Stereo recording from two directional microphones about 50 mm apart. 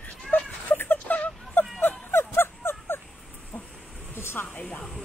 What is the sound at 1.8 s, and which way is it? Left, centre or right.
Music, left.